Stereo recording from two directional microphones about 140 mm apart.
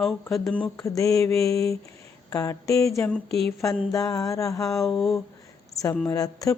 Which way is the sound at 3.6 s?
25° left (ahead or behind).